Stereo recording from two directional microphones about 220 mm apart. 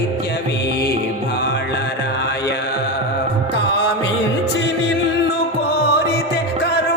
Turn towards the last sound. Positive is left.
turn(degrees=45)  # may be behind; listen again after turning